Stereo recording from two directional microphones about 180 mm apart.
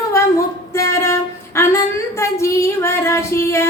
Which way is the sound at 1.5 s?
15° left (ahead or behind).